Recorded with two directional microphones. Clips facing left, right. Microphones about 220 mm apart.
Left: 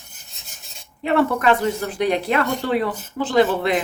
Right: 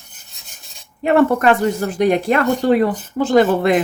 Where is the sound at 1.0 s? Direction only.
45° right (ahead or behind).